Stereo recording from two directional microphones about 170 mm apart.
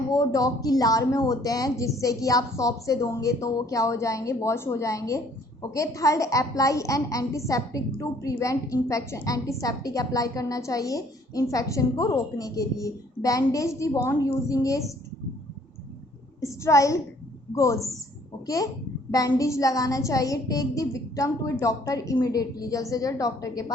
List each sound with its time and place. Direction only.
0.1 s a woman's voice: 20° left (ahead or behind)
16.4 s a child's voice: 20° left (ahead or behind)